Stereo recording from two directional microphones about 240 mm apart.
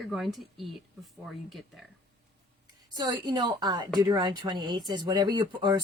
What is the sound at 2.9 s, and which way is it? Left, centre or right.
A woman's voice, centre.